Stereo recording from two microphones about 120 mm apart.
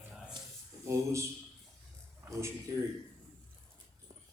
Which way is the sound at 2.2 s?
25° right (ahead or behind).